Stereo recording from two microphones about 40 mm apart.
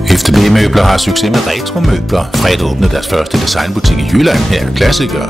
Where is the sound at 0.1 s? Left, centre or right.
Centre.